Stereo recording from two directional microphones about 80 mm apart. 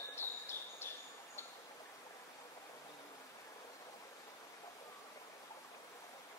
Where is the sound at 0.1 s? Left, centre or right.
Left.